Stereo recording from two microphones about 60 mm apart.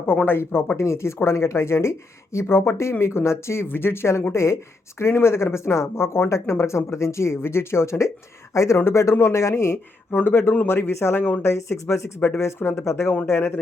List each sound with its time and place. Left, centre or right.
0.3 s speech: left
10.2 s speech: left
11.5 s speech: left
12.8 s speech: left
13.2 s speech: left